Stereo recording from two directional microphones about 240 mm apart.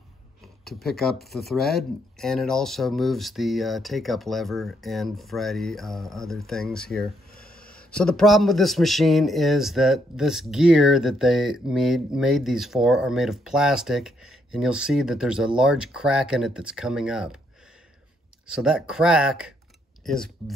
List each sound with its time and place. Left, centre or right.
0.7 s speech: centre
7.3 s a sound: left
7.7 s speech: centre
18.5 s speech: centre